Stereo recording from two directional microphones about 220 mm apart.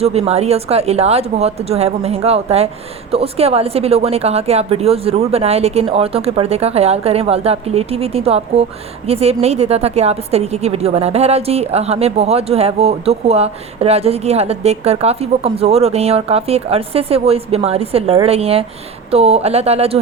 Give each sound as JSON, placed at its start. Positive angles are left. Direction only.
{"t": 0.0, "sound": "a woman's voice", "side_deg": -30}